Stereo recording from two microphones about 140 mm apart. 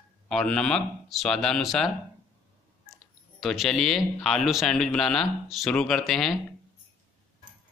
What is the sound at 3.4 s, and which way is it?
Speech, centre (ahead or behind).